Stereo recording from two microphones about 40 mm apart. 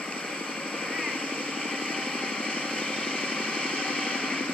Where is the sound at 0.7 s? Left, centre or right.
Left.